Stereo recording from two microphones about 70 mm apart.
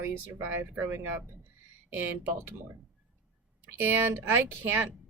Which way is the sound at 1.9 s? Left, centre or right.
Right.